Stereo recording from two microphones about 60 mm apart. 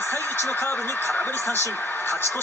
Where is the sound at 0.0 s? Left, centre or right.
Left.